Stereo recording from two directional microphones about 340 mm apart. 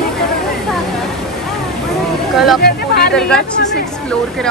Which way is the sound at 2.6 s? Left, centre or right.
Left.